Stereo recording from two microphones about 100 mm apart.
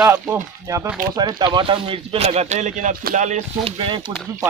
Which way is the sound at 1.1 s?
45° right (ahead or behind).